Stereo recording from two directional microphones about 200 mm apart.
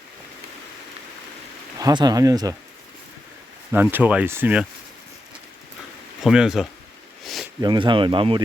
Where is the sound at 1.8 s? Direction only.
20° right (ahead or behind).